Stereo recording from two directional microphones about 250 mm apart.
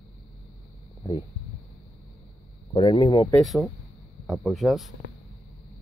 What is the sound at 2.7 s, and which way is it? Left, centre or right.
Speech, centre.